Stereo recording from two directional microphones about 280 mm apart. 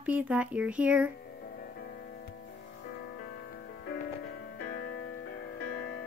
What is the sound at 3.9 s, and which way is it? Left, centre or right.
Music, left.